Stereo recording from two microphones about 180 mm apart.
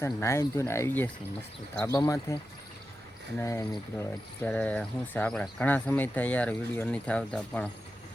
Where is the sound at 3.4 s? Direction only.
15° left (ahead or behind).